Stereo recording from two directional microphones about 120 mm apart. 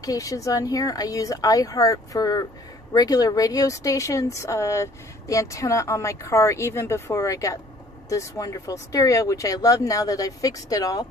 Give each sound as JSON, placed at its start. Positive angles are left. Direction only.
{"t": 0.0, "sound": "speech", "side_deg": 30}